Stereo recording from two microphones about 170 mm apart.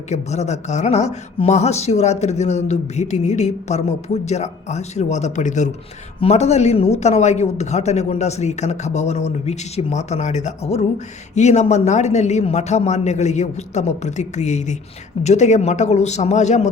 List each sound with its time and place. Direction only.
0.1 s a man's voice: 40° left (ahead or behind)